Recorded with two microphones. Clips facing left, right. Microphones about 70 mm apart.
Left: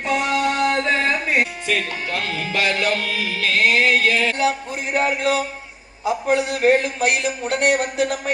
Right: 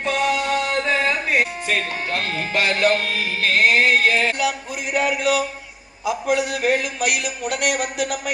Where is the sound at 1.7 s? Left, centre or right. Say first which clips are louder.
Even; right.